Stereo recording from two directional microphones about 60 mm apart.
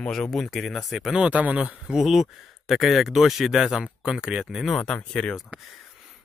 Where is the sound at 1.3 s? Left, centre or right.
Right.